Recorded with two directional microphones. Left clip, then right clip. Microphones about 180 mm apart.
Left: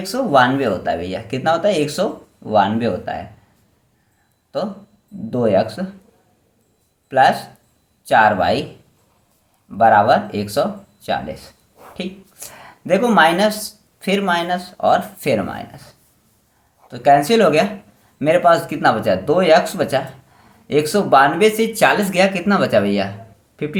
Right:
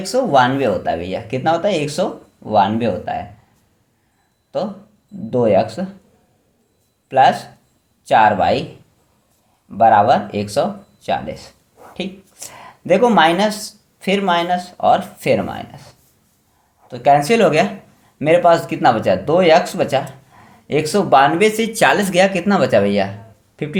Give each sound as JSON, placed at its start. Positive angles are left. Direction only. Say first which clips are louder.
{"t": 0.0, "sound": "speech", "louder": "right 1 dB", "side_deg": -20}
{"t": 4.5, "sound": "speech", "louder": "right 1 dB", "side_deg": -15}
{"t": 7.1, "sound": "speech", "louder": "right 1 dB", "side_deg": -15}
{"t": 9.7, "sound": "speech", "louder": "right 1 dB", "side_deg": -15}
{"t": 16.9, "sound": "speech", "louder": "even", "side_deg": -15}